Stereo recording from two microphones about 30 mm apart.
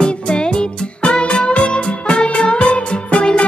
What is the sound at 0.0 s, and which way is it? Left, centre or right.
Music, left.